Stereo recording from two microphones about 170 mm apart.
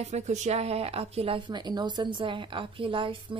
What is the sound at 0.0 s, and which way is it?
A woman's voice, 45° right (ahead or behind).